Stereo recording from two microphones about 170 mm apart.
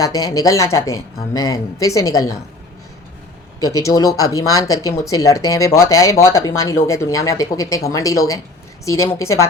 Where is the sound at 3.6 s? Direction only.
20° left (ahead or behind).